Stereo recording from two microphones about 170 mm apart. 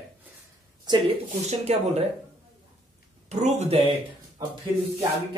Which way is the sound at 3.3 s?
40° right (ahead or behind).